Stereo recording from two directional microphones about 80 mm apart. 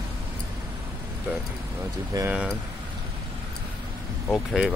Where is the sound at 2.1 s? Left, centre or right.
Right.